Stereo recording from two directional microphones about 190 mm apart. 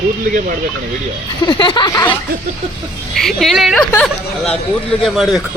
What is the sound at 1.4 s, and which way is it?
Speech, 25° left (ahead or behind).